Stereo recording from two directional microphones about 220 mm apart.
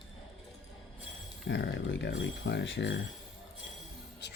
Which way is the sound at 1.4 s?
50° left (ahead or behind).